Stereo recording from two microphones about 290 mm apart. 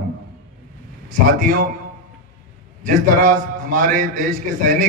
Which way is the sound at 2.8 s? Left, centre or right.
Right.